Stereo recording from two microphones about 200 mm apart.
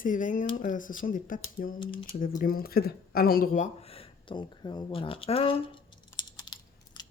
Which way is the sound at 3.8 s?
30° left (ahead or behind).